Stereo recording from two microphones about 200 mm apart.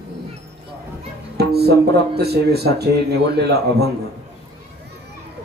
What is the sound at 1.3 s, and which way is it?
Speech, 55° right (ahead or behind).